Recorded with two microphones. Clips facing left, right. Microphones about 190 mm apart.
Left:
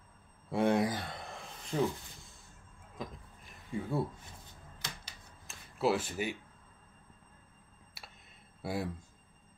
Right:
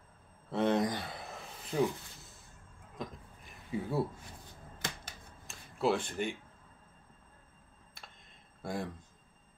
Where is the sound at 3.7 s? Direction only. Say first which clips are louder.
Right 1 dB; 5° right (ahead or behind).